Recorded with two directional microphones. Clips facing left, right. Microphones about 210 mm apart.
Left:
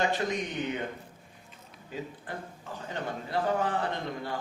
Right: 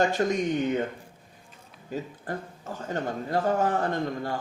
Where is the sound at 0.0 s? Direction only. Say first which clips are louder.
Right 5 dB; 45° right (ahead or behind).